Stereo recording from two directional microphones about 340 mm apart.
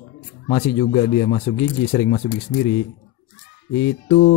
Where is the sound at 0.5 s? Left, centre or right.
Left.